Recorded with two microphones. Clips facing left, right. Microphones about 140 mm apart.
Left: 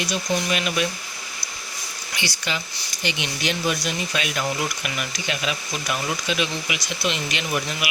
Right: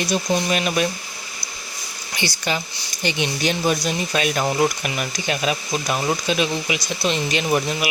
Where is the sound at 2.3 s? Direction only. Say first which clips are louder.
Right 5 dB; 45° right (ahead or behind).